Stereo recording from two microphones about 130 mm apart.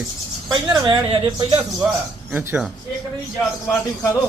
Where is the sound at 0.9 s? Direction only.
45° right (ahead or behind).